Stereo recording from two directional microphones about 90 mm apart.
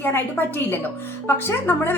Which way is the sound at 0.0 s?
20° left (ahead or behind).